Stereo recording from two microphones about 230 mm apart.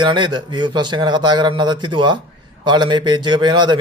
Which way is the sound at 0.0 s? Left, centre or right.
Centre.